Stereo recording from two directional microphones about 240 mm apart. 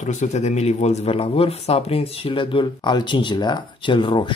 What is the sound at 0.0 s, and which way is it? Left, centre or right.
Speech, left.